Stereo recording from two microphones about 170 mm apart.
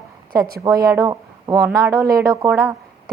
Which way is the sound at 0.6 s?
20° right (ahead or behind).